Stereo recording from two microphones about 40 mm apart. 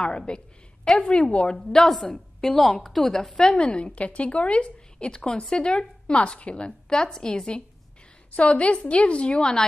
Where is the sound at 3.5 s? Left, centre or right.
Left.